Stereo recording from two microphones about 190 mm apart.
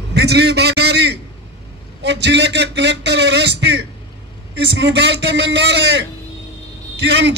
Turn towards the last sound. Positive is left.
turn(degrees=-65)  # may be behind; listen again after turning